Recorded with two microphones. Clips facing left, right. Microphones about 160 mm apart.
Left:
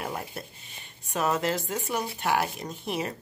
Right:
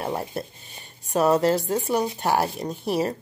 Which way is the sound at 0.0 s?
35° right (ahead or behind).